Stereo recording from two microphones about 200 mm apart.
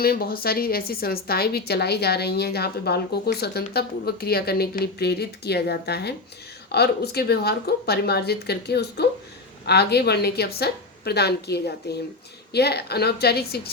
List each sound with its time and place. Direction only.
0.0 s a woman's voice: 50° left (ahead or behind)